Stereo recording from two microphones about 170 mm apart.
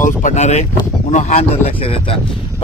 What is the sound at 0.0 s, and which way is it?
Speech, 45° left (ahead or behind).